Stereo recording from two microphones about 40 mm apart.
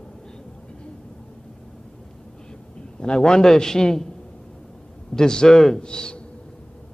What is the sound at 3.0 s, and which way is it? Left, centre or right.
A man's voice, left.